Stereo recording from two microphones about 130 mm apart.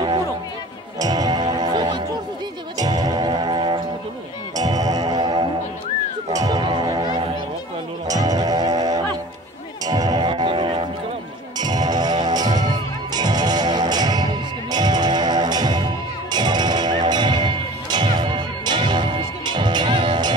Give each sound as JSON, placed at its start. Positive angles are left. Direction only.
{"t": 0.9, "sound": "music", "side_deg": -30}